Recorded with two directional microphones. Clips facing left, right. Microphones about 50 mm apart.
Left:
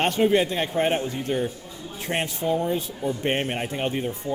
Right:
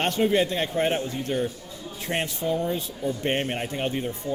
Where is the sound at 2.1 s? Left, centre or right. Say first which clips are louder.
Left 1 dB; left.